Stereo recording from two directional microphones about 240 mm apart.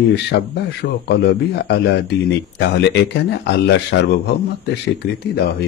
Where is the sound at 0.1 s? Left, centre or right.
Left.